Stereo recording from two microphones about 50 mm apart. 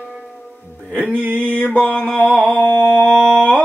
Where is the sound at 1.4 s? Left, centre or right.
Left.